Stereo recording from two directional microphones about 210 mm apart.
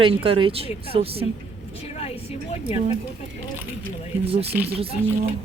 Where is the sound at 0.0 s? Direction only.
25° right (ahead or behind).